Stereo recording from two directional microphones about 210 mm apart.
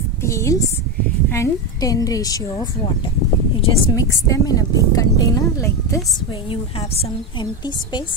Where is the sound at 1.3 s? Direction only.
15° left (ahead or behind).